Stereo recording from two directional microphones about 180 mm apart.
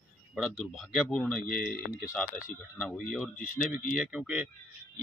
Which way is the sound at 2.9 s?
Centre (ahead or behind).